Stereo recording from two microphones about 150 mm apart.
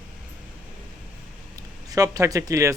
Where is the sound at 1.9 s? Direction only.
25° right (ahead or behind).